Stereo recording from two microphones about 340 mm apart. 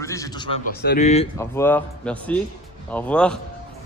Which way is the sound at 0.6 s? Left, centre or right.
Left.